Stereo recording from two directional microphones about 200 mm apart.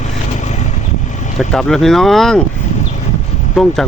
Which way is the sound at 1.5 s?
Centre (ahead or behind).